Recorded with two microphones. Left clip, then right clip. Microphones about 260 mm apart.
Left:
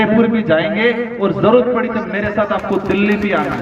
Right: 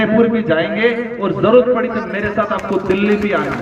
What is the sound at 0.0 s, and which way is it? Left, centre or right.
A man's voice, left.